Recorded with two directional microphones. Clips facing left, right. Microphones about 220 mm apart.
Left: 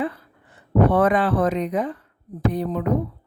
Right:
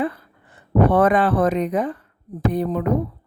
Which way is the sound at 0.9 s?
50° right (ahead or behind).